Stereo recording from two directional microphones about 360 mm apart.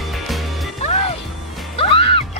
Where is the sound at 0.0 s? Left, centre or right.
Centre.